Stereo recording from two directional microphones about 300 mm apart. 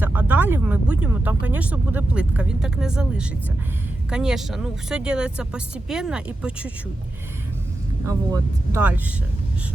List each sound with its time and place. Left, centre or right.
0.0 s a sound: centre
1.0 s speech: centre
8.0 s speech: centre